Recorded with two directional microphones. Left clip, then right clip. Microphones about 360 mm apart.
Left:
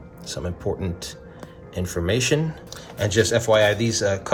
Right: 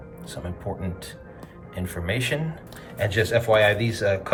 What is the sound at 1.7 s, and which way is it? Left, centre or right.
Speech, centre.